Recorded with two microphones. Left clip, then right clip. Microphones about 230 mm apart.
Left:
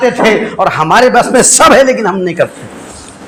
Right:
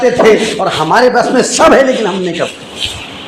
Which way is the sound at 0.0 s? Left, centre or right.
Left.